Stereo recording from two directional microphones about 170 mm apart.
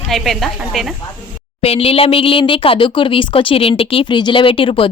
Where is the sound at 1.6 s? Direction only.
35° left (ahead or behind).